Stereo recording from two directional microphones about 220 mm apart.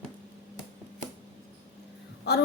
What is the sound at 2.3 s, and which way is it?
Speech, 50° left (ahead or behind).